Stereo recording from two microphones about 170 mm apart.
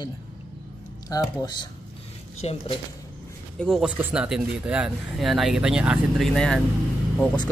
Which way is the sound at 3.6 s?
Centre (ahead or behind).